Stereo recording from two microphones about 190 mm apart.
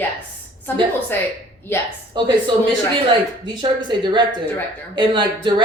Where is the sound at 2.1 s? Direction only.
25° right (ahead or behind).